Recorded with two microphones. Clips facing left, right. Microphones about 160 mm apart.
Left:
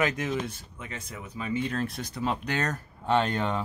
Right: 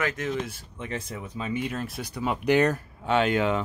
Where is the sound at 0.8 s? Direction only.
30° right (ahead or behind).